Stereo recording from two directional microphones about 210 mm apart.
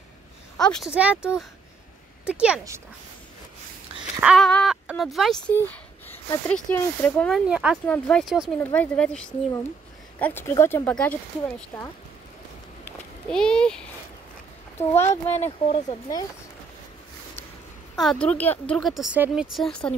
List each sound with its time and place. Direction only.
0.6 s speech: 5° left (ahead or behind)
4.2 s speech: centre (ahead or behind)
12.8 s a sound: 5° left (ahead or behind)
14.8 s speech: 10° left (ahead or behind)
15.3 s speech: 30° left (ahead or behind)
18.0 s speech: 5° left (ahead or behind)